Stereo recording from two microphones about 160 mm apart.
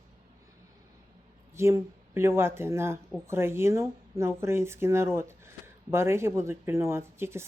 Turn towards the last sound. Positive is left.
turn(degrees=-15)  # may be behind; listen again after turning